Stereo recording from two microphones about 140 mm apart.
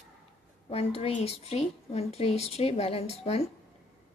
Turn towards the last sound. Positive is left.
turn(degrees=50)  # may be behind; listen again after turning